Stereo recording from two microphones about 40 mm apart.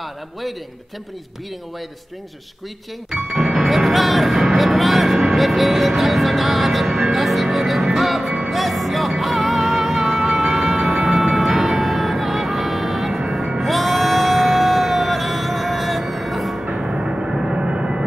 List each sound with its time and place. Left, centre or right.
0.0 s a man's voice: centre
3.1 s music: centre
10.5 s vehicle: centre
13.2 s music: centre
13.6 s a sound: centre
16.6 s music: centre